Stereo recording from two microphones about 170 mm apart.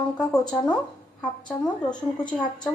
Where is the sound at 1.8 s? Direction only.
25° left (ahead or behind).